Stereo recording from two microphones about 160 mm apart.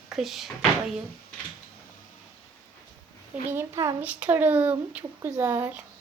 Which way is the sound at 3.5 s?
15° right (ahead or behind).